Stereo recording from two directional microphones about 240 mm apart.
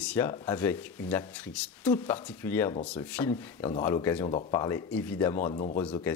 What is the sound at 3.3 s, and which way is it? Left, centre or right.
Speech, left.